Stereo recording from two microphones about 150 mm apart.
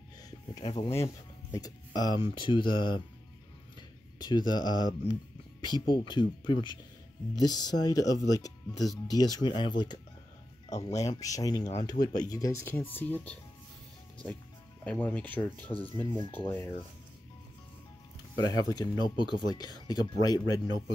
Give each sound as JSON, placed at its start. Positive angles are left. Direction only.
{"t": 0.6, "sound": "speech", "side_deg": 40}
{"t": 2.0, "sound": "speech", "side_deg": 30}
{"t": 4.2, "sound": "speech", "side_deg": 30}
{"t": 14.9, "sound": "speech", "side_deg": 10}
{"t": 18.4, "sound": "speech", "side_deg": 25}